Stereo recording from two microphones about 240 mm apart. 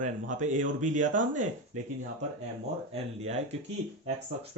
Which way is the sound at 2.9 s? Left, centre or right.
Right.